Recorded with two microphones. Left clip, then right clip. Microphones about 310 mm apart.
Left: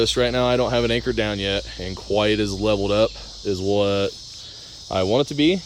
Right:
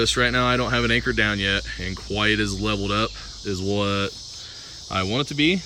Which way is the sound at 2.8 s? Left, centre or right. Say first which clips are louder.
Left 5 dB; centre.